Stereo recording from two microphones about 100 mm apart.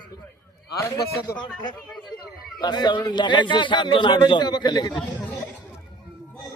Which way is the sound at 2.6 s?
45° left (ahead or behind).